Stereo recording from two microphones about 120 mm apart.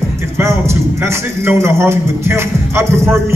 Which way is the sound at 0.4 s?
20° right (ahead or behind).